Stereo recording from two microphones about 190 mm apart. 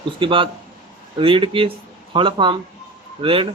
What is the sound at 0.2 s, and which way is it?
A man's voice, 25° right (ahead or behind).